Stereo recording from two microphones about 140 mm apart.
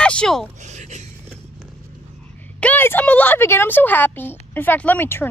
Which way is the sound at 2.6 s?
15° left (ahead or behind).